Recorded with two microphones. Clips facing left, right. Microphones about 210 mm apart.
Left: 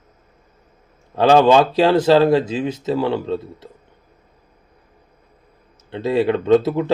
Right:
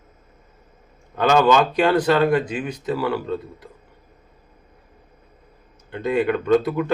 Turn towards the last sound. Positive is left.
turn(degrees=25)  # may be behind; listen again after turning